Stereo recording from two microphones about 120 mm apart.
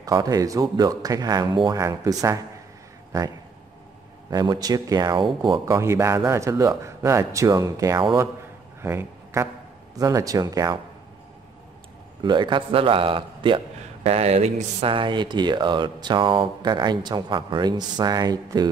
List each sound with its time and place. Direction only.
0.0 s speech: 30° right (ahead or behind)
4.3 s speech: 35° right (ahead or behind)
5.7 s speech: 25° right (ahead or behind)
12.2 s a man's voice: 40° right (ahead or behind)
14.0 s speech: 60° right (ahead or behind); by 18.7 s 35° right (ahead or behind)